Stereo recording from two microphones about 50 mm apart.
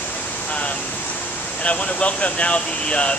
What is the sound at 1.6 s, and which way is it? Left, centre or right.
Speech, left.